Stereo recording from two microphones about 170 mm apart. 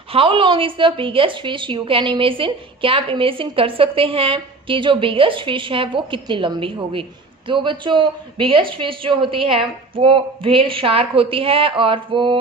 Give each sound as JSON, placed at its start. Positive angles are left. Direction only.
{"t": 0.1, "sound": "a woman's voice", "side_deg": -30}